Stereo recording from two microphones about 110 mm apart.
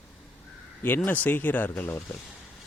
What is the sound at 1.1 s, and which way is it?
A man's voice, 15° left (ahead or behind).